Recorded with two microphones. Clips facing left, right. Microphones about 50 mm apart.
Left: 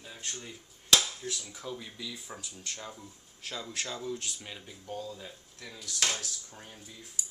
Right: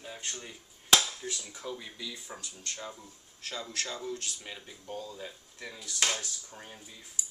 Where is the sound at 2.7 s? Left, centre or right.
Centre.